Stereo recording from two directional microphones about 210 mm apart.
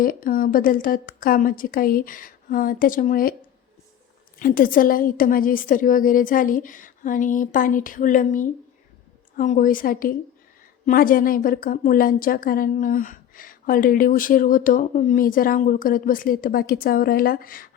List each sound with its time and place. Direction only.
0.0 s a woman's voice: 40° left (ahead or behind)
4.4 s a woman's voice: 40° left (ahead or behind)